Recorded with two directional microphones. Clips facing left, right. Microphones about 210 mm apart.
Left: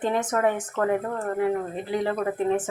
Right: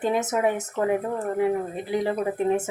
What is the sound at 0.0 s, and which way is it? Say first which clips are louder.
Speech: even; 10° right (ahead or behind).